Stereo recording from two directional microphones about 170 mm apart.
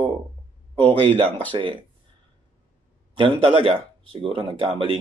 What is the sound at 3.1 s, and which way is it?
Speech, 30° right (ahead or behind).